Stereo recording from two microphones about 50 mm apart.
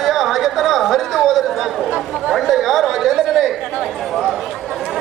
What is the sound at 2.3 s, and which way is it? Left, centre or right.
Chatter, centre.